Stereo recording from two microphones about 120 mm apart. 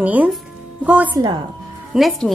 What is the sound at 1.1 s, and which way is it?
Speech, 35° right (ahead or behind).